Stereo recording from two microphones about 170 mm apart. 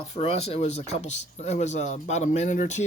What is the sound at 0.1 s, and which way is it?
Speech, 35° left (ahead or behind).